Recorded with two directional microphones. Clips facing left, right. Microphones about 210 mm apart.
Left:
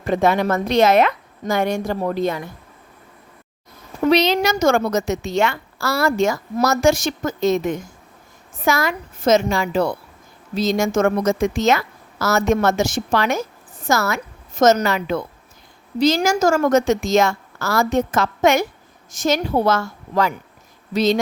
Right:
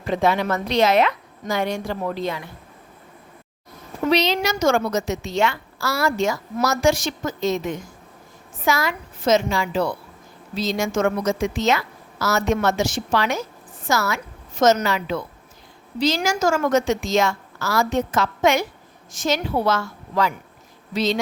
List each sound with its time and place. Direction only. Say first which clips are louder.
0.0 s a woman's voice: left 3 dB; 50° left (ahead or behind)
4.1 s a woman's voice: left 3 dB; 50° left (ahead or behind)